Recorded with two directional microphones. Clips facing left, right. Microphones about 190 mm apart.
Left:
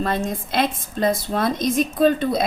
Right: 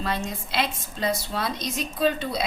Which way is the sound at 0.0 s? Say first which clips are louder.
Left 6 dB; 50° left (ahead or behind).